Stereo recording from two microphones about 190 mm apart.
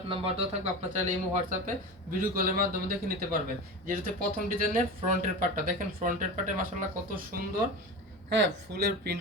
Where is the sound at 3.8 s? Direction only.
45° right (ahead or behind).